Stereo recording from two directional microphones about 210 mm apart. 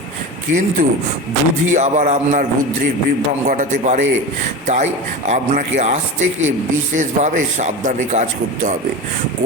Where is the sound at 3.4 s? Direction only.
35° right (ahead or behind).